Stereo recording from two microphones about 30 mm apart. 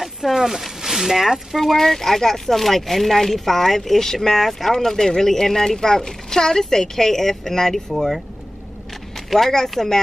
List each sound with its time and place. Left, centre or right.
0.0 s speech: centre
1.6 s speech: centre
9.1 s a sound: centre
9.5 s speech: centre